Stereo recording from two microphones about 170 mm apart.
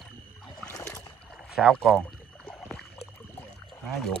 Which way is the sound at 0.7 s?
20° left (ahead or behind).